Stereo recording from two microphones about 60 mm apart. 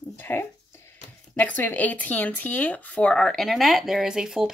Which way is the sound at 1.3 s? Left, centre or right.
Left.